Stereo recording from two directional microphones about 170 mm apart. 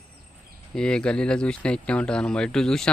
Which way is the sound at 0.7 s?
5° left (ahead or behind).